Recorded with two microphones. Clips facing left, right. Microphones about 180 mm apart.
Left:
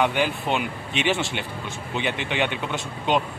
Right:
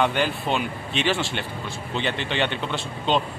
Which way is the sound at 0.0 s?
10° left (ahead or behind).